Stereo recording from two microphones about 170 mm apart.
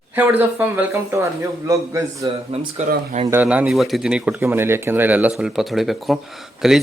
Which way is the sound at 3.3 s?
10° right (ahead or behind).